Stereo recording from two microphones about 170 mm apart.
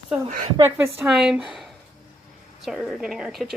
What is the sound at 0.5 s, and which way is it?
A woman's voice, 15° right (ahead or behind).